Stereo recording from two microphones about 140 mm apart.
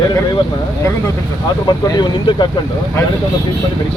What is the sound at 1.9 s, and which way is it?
Speech, 30° left (ahead or behind).